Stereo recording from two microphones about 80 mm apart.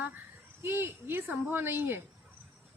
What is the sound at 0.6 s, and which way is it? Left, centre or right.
A woman's voice, right.